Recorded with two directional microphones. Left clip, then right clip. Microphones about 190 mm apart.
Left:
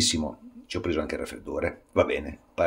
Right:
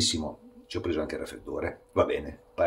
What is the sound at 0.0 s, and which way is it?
Speech, 25° left (ahead or behind).